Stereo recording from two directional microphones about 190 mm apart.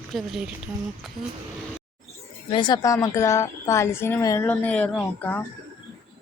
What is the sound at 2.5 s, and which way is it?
A woman's voice, 25° left (ahead or behind).